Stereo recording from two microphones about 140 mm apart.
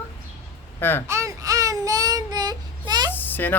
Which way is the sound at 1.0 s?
20° right (ahead or behind).